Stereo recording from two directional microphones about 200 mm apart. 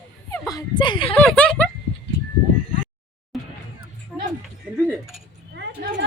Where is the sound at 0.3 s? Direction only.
15° left (ahead or behind).